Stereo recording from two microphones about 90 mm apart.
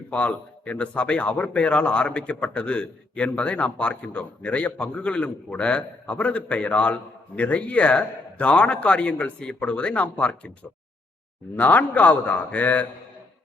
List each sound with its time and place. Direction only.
0.1 s a man's voice: 15° left (ahead or behind)